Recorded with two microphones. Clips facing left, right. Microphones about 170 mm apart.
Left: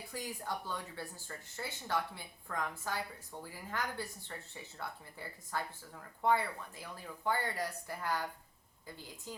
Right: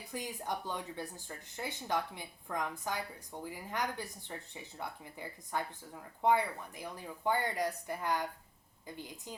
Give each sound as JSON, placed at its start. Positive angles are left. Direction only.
{"t": 0.1, "sound": "speech", "side_deg": -20}